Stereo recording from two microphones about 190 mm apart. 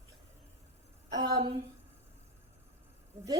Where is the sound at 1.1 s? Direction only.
25° right (ahead or behind).